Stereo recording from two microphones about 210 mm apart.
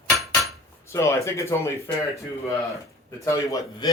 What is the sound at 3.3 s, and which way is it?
Speech, 15° left (ahead or behind).